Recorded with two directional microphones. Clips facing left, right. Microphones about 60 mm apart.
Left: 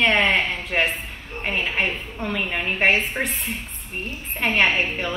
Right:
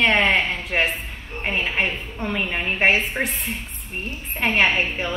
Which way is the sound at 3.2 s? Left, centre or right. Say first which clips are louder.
Right 1 dB; right.